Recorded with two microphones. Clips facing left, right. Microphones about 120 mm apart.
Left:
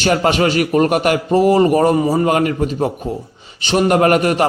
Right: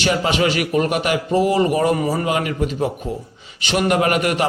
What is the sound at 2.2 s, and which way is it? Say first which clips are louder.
A man's voice: left 5 dB; 45° left (ahead or behind).